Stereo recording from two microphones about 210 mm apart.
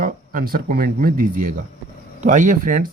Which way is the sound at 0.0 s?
40° right (ahead or behind).